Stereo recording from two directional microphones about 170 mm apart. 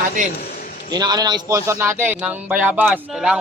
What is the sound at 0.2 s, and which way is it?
Speech, 50° right (ahead or behind).